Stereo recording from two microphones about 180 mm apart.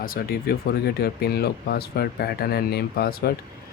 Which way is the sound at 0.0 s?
55° left (ahead or behind).